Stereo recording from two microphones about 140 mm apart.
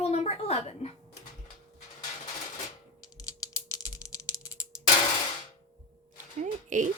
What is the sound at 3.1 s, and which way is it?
Music, 25° left (ahead or behind).